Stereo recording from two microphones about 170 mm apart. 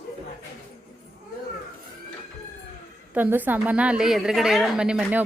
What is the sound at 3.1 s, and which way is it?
Speech, 10° right (ahead or behind).